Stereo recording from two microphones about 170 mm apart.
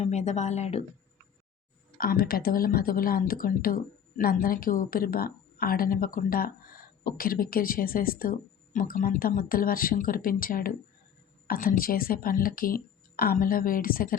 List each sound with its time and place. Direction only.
0.0 s a woman's voice: 40° left (ahead or behind)
2.0 s a woman's voice: 60° left (ahead or behind)